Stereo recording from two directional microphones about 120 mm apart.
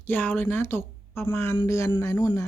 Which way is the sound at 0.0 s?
15° left (ahead or behind).